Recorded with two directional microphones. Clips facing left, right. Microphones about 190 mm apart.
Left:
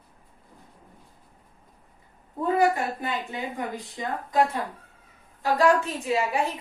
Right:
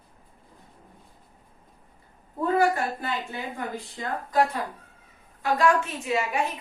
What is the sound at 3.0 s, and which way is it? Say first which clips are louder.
A woman's voice: left 1 dB; 15° left (ahead or behind).